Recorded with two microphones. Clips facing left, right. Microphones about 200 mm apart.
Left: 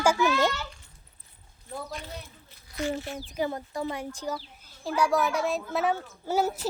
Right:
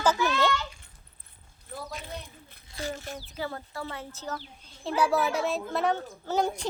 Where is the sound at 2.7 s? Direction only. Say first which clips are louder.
Left 5 dB; 30° right (ahead or behind).